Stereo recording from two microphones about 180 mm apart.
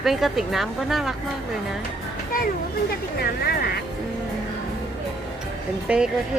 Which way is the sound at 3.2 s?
60° left (ahead or behind).